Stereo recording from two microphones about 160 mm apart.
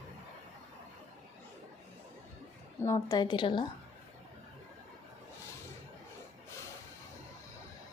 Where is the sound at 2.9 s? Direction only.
25° left (ahead or behind).